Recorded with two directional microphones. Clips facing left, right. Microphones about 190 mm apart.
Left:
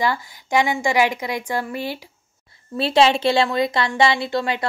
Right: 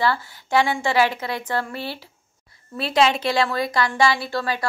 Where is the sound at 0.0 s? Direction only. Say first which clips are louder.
Even; 15° left (ahead or behind).